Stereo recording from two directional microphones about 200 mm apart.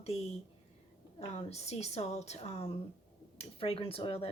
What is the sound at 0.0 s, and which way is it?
Speech, 30° left (ahead or behind).